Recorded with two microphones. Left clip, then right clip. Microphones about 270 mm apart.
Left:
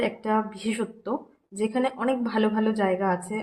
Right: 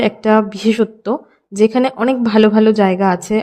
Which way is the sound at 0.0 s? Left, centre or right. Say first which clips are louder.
Right 12 dB; right.